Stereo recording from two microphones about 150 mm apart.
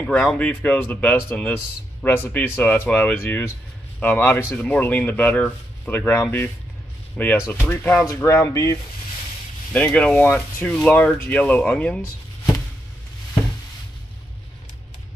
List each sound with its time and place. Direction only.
0.0 s speech: 5° left (ahead or behind)
9.7 s speech: 10° left (ahead or behind)